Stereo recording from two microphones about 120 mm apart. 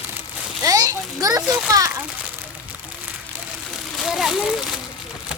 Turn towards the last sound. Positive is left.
turn(degrees=0)  # may be behind; listen again after turning